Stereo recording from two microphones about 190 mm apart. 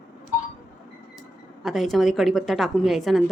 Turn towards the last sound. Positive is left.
turn(degrees=0)  # may be behind; listen again after turning